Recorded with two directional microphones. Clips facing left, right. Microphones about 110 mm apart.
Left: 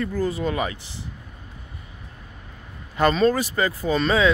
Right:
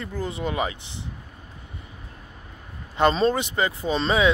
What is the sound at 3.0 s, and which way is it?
Speech, 25° right (ahead or behind).